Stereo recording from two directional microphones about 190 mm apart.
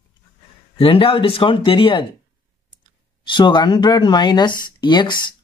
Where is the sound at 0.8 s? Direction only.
30° left (ahead or behind).